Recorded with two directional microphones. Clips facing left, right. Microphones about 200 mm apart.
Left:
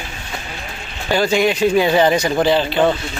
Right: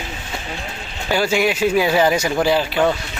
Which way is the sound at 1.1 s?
10° right (ahead or behind).